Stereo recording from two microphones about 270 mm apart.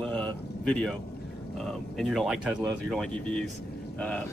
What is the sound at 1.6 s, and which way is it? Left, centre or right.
A man's voice, centre.